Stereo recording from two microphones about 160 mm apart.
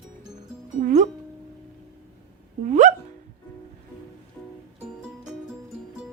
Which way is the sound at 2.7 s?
50° right (ahead or behind).